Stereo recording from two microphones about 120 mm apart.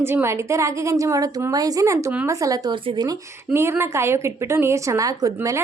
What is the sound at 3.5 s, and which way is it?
A woman's voice, 20° right (ahead or behind).